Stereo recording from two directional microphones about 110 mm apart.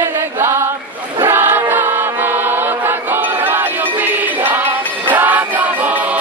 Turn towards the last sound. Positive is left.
turn(degrees=-15)  # may be behind; listen again after turning